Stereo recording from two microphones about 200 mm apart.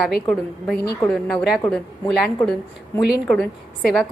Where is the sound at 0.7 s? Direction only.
50° left (ahead or behind).